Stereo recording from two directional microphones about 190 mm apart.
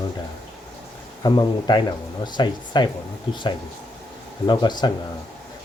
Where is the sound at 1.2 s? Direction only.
20° left (ahead or behind).